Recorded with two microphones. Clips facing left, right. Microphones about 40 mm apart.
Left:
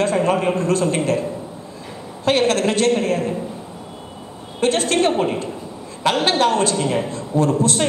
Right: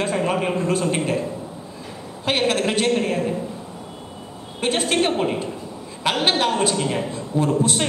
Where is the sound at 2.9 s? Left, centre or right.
Centre.